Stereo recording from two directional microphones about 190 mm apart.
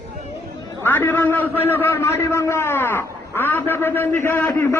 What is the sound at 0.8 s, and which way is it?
A man's voice, 10° left (ahead or behind).